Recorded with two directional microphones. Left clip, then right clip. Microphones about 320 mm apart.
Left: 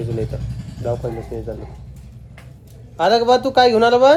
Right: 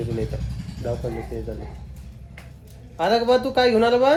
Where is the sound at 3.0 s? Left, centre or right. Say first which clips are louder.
Left 5 dB; centre.